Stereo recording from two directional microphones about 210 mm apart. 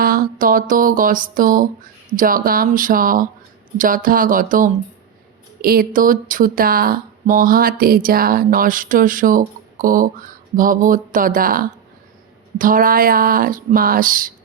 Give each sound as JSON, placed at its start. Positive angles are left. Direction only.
{"t": 0.0, "sound": "speech", "side_deg": -45}